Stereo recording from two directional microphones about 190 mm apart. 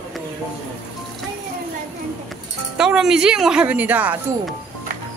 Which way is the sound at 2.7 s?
5° right (ahead or behind).